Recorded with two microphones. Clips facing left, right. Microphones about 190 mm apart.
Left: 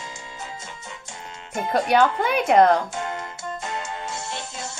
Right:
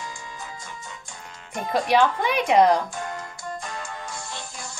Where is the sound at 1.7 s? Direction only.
5° left (ahead or behind).